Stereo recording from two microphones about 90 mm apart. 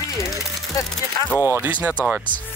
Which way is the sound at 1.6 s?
15° right (ahead or behind).